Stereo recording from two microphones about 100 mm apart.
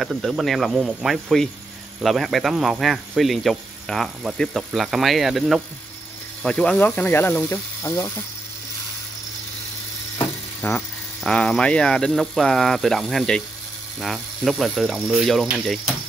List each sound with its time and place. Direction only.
0.0 s speech: centre (ahead or behind)
6.4 s speech: 10° left (ahead or behind)
10.1 s a sound: 20° left (ahead or behind)
11.2 s speech: 5° left (ahead or behind)